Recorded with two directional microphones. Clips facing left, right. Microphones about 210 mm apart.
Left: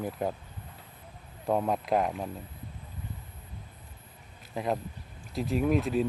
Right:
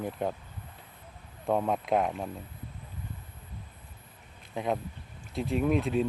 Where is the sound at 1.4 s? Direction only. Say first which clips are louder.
Even; centre (ahead or behind).